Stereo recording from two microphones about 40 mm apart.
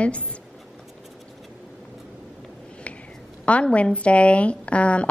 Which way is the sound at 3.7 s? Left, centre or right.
Left.